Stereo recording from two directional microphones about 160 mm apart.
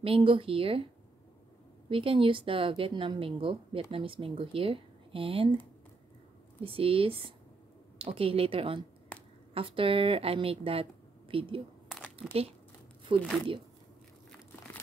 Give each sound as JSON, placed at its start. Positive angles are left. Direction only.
{"t": 0.0, "sound": "a woman's voice", "side_deg": -35}
{"t": 1.9, "sound": "a woman's voice", "side_deg": -35}
{"t": 6.6, "sound": "a woman's voice", "side_deg": -35}